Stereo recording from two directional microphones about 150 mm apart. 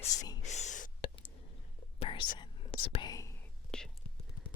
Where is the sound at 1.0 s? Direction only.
35° left (ahead or behind).